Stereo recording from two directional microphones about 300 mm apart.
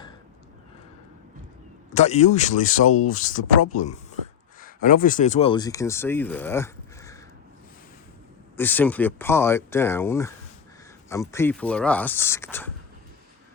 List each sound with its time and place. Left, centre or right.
1.9 s speech: left
8.5 s speech: centre